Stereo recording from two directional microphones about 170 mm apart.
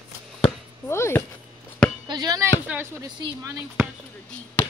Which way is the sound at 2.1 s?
20° right (ahead or behind).